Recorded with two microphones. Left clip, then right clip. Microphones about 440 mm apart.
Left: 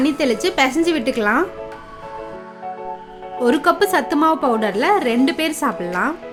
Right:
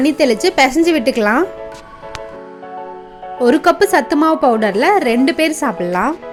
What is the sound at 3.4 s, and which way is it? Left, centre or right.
Speech, centre.